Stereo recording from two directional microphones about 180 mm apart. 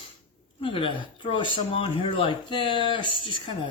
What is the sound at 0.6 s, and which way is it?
Speech, 30° left (ahead or behind).